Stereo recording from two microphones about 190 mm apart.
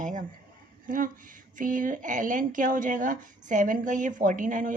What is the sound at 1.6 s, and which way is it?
Speech, 45° right (ahead or behind).